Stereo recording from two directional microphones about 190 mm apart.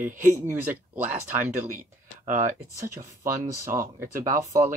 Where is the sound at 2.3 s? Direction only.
40° right (ahead or behind).